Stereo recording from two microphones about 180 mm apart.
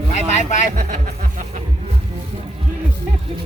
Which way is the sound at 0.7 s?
45° right (ahead or behind).